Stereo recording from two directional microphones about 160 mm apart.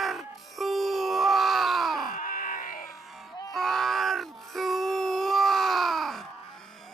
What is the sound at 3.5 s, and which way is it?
Groan, centre (ahead or behind).